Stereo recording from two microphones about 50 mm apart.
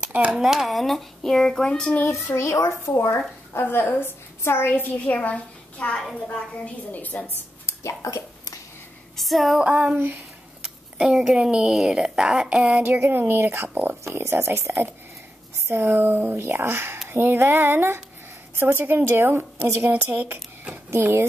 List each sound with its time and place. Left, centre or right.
0.3 s speech: centre
2.0 s a child's voice: left
3.5 s a woman's voice: left
4.9 s a woman's voice: left
8.0 s speech: left
9.1 s a sound: centre
9.6 s female singing: right
9.9 s a woman's voice: right
10.6 s a sound: centre
11.3 s speech: centre
11.7 s speech: centre
13.0 s a woman's voice: right
15.8 s a woman's voice: right
21.0 s a woman's voice: right